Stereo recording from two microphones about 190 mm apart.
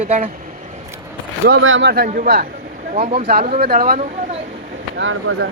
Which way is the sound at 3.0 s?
35° right (ahead or behind).